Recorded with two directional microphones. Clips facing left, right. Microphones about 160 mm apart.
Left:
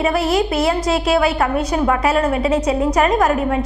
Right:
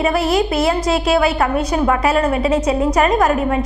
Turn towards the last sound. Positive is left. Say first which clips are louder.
# right 1 dB
turn(degrees=-20)  # may be behind; listen again after turning